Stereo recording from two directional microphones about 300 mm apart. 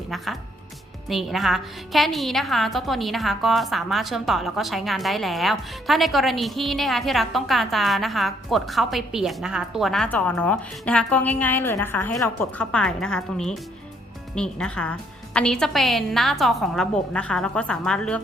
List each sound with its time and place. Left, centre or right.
1.0 s a woman's voice: centre